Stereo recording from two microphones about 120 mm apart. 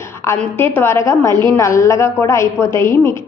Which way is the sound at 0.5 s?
20° left (ahead or behind).